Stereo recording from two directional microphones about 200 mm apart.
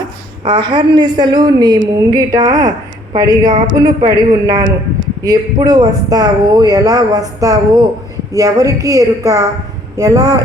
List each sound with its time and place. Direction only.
0.4 s a woman's voice: 25° right (ahead or behind)